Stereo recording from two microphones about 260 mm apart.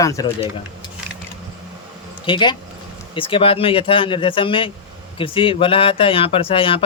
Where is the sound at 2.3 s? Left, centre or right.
Centre.